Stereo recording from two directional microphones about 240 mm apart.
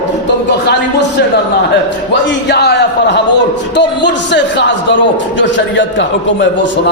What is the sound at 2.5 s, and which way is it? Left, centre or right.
A man's voice, left.